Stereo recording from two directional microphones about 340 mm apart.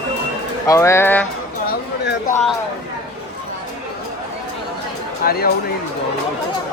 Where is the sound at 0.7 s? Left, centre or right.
Centre.